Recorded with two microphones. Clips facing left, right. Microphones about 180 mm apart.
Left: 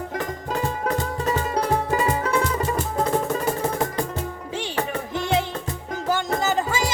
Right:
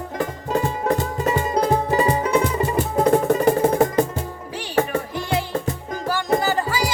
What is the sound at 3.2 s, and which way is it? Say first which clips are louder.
Music: right 7 dB; 65° right (ahead or behind).